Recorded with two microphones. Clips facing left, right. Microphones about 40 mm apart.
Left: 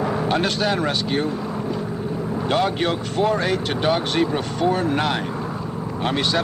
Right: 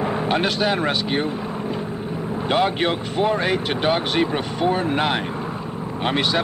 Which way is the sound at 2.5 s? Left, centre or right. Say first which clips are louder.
Right 1 dB; right.